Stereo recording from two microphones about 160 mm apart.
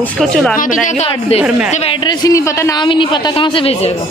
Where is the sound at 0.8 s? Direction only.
40° left (ahead or behind).